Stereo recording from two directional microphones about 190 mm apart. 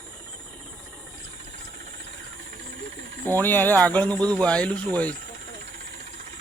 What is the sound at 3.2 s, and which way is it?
Speech, 10° left (ahead or behind).